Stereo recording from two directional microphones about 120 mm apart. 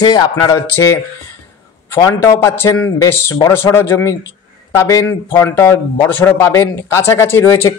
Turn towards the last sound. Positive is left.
turn(degrees=20)  # may be behind; listen again after turning